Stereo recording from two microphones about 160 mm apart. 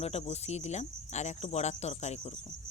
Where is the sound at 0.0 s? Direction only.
40° left (ahead or behind).